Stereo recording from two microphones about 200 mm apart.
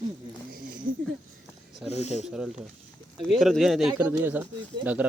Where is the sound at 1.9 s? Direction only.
35° left (ahead or behind).